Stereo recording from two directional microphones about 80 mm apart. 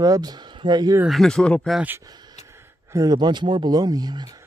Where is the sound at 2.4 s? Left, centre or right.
Right.